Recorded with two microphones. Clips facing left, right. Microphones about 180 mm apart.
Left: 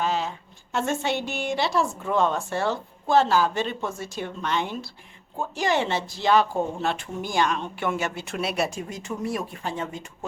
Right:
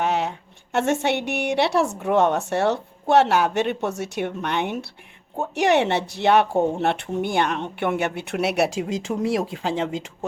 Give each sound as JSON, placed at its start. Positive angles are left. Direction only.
{"t": 0.0, "sound": "a woman's voice", "side_deg": -65}